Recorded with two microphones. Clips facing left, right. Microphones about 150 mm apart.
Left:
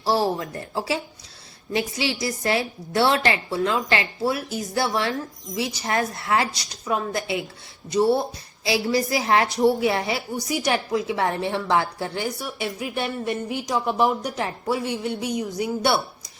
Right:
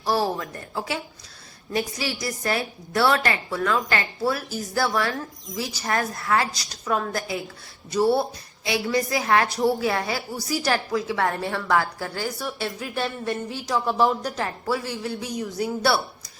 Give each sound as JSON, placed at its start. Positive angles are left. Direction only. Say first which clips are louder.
{"t": 0.0, "sound": "a woman's voice", "louder": "left 2 dB", "side_deg": 25}
{"t": 6.9, "sound": "speech", "louder": "even", "side_deg": 10}
{"t": 8.6, "sound": "a woman's voice", "louder": "left 2 dB", "side_deg": 30}